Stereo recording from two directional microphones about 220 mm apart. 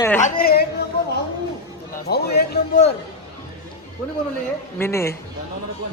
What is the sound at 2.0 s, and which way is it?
Speech, 45° left (ahead or behind).